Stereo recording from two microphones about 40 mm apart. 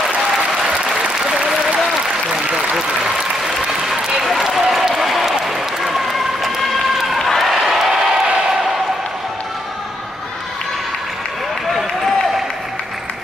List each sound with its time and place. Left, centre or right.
2.3 s applause: centre
4.2 s applause: centre
5.9 s run: centre
7.2 s a sound: centre